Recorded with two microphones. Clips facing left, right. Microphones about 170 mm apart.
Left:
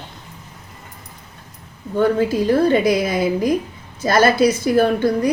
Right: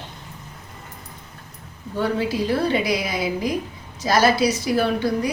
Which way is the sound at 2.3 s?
45° left (ahead or behind).